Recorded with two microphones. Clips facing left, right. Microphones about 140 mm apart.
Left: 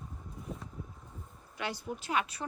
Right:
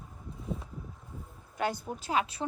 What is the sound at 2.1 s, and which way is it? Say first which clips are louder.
Speech: right 3 dB; 30° right (ahead or behind).